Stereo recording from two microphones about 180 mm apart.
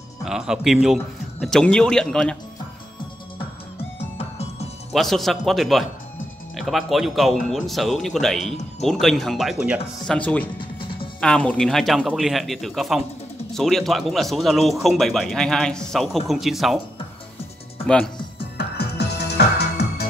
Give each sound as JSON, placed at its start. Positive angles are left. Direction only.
{"t": 0.2, "sound": "speech", "side_deg": -5}
{"t": 4.2, "sound": "music", "side_deg": 35}
{"t": 4.9, "sound": "speech", "side_deg": 0}
{"t": 10.0, "sound": "speech", "side_deg": 5}
{"t": 10.6, "sound": "music", "side_deg": 30}
{"t": 11.1, "sound": "speech", "side_deg": 5}
{"t": 17.8, "sound": "speech", "side_deg": 5}
{"t": 18.6, "sound": "music", "side_deg": 65}